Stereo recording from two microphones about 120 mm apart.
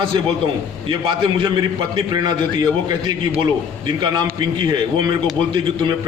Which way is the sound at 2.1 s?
35° right (ahead or behind).